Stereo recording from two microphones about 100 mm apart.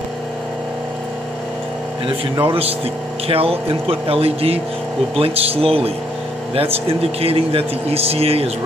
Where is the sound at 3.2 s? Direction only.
75° right (ahead or behind).